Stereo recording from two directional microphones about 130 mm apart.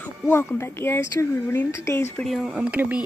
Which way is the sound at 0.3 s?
20° left (ahead or behind).